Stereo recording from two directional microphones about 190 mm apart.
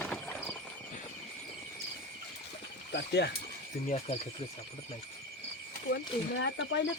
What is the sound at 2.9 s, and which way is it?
Speech, 65° left (ahead or behind).